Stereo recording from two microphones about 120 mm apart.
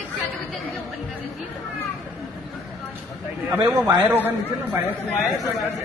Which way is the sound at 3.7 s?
35° right (ahead or behind).